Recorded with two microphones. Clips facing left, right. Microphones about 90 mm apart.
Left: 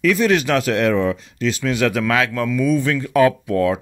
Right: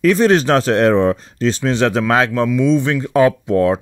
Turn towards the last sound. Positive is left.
turn(degrees=-30)  # may be behind; listen again after turning